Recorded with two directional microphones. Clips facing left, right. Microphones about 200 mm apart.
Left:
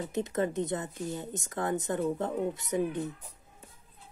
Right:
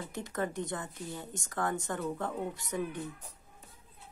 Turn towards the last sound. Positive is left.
turn(degrees=20)  # may be behind; listen again after turning